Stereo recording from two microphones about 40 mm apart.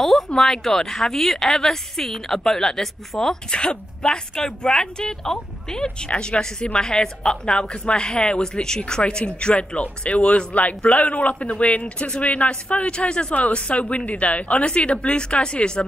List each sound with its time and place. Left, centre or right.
0.4 s a woman's voice: centre
5.9 s a woman's voice: left